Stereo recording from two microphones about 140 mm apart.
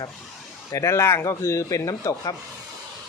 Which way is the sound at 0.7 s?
20° left (ahead or behind).